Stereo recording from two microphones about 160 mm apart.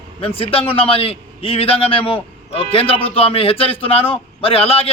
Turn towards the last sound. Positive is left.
turn(degrees=35)  # may be behind; listen again after turning